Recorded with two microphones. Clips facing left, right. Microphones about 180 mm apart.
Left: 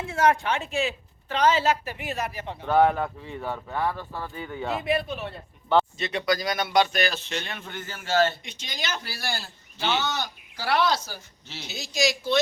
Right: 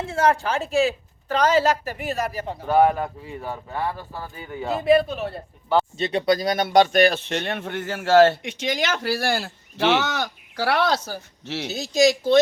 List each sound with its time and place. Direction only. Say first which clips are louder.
0.0 s a woman's voice: right 2 dB; 35° right (ahead or behind)
2.6 s speech: right 2 dB; 10° right (ahead or behind)
4.6 s a woman's voice: right 8 dB; 35° right (ahead or behind); by 11.7 s 70° right (ahead or behind)
11.7 s speech: right 8 dB; 50° right (ahead or behind)